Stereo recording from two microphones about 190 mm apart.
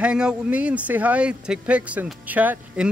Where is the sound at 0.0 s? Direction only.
5° right (ahead or behind).